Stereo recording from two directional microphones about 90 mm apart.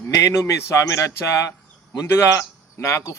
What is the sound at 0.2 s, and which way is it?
Speech, 35° left (ahead or behind).